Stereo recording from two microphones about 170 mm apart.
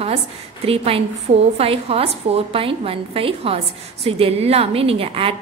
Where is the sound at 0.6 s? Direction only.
35° right (ahead or behind).